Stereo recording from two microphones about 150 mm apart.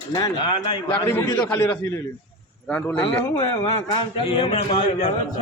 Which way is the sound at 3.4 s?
35° left (ahead or behind).